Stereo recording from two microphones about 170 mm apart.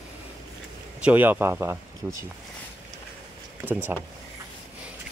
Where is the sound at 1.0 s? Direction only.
10° right (ahead or behind).